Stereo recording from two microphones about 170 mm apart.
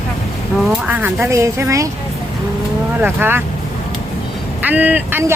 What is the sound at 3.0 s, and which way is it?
Speech, 10° right (ahead or behind).